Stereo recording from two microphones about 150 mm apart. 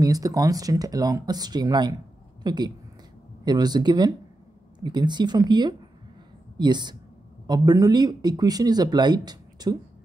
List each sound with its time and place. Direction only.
0.0 s speech: 25° right (ahead or behind)